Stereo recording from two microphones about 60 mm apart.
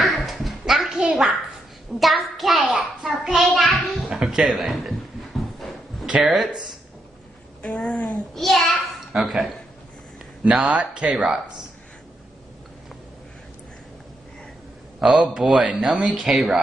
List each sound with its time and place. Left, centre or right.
0.0 s a sound: centre
0.9 s a child's voice: centre
5.6 s a sound: centre
6.2 s speech: centre
7.7 s speech: centre
8.4 s a child's voice: centre
11.2 s speech: centre
15.0 s speech: centre
15.8 s speech: centre